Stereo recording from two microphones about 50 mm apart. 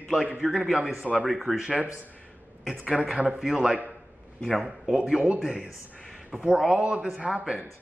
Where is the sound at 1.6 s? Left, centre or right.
Right.